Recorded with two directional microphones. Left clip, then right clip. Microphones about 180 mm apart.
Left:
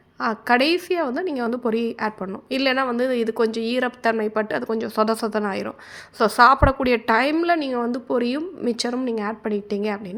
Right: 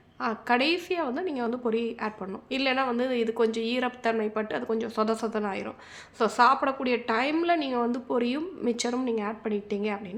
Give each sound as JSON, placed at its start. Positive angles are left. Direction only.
{"t": 0.2, "sound": "a woman's voice", "side_deg": 35}